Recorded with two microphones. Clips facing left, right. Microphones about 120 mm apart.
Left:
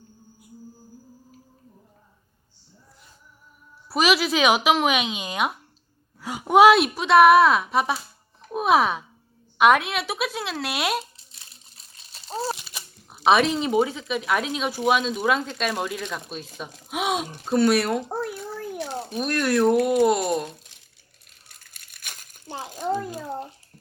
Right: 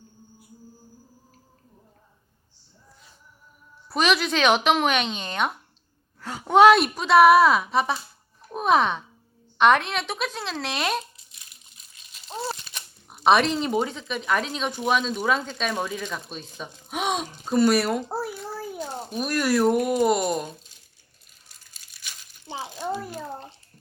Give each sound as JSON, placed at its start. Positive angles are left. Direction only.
{"t": 3.8, "sound": "speech", "side_deg": 5}
{"t": 11.0, "sound": "crumpling", "side_deg": 30}
{"t": 11.9, "sound": "rattle", "side_deg": 35}
{"t": 12.6, "sound": "speech", "side_deg": 5}
{"t": 18.7, "sound": "a sound", "side_deg": 80}
{"t": 19.1, "sound": "speech", "side_deg": 0}
{"t": 21.4, "sound": "a sound", "side_deg": 60}
{"t": 23.0, "sound": "a child's voice", "side_deg": 15}